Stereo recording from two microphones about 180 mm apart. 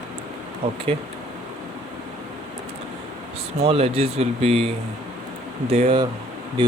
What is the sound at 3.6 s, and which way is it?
Speech, 35° right (ahead or behind).